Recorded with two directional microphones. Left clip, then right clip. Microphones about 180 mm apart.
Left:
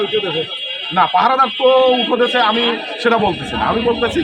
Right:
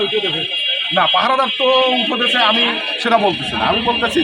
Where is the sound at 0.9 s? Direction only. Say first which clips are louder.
Left 3 dB; 10° right (ahead or behind).